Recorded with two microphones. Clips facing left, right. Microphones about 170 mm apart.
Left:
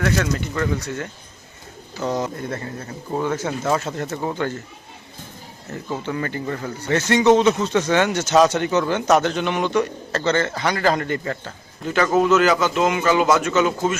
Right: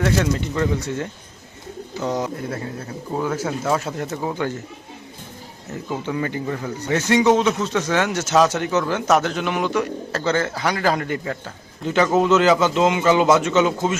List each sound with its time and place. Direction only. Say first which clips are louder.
0.5 s a man's voice: right 2 dB; 25° right (ahead or behind)
2.0 s speech: even; 15° right (ahead or behind)
5.9 s speech: right 1 dB; 5° right (ahead or behind)
11.9 s a man's voice: even; 20° right (ahead or behind)